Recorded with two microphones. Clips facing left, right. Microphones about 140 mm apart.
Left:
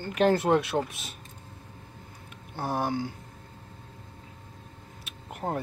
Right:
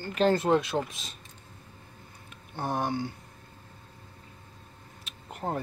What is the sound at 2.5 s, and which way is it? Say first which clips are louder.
Speech: left 1 dB; 5° left (ahead or behind).